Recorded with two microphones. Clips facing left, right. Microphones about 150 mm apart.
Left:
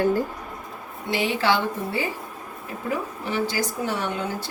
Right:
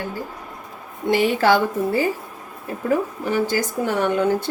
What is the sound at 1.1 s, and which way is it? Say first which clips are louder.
Speech: right 5 dB; 50° right (ahead or behind).